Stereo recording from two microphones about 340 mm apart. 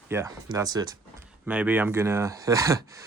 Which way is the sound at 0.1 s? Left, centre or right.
Centre.